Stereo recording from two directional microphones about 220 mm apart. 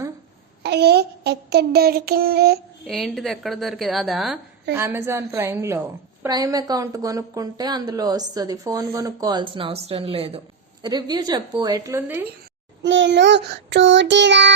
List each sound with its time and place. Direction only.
0.6 s child singing: 50° right (ahead or behind)
2.8 s a woman's voice: centre (ahead or behind)
12.8 s child singing: 55° right (ahead or behind)